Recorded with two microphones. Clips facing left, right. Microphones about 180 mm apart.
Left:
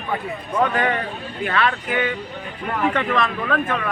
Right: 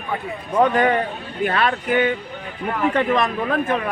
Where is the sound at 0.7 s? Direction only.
40° right (ahead or behind).